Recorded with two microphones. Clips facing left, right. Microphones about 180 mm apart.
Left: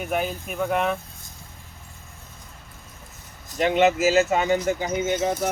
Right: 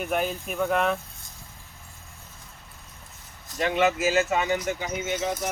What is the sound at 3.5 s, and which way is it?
Speech, 25° left (ahead or behind).